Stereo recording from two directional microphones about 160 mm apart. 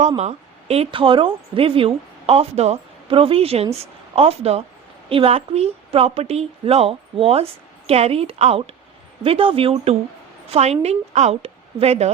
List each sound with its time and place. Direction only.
0.2 s a woman's voice: 40° right (ahead or behind)